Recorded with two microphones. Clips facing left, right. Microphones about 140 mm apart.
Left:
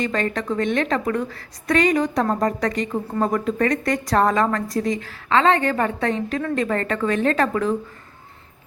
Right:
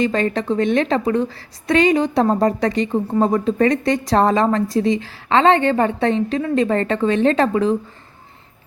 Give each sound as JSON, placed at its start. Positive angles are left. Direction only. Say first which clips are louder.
{"t": 0.0, "sound": "a woman's voice", "louder": "right 5 dB", "side_deg": -30}